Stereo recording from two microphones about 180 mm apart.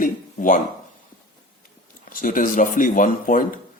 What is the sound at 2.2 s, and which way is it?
A man's voice, 50° left (ahead or behind).